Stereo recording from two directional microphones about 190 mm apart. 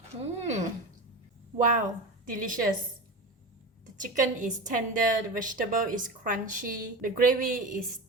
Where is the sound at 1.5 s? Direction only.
40° right (ahead or behind).